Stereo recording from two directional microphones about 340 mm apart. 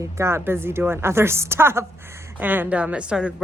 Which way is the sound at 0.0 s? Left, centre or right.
Centre.